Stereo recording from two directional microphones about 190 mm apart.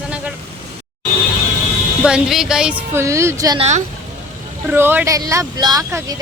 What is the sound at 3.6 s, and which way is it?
Speech, 35° right (ahead or behind).